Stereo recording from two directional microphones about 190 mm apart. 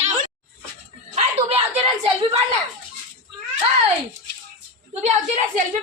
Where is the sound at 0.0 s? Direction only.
40° right (ahead or behind).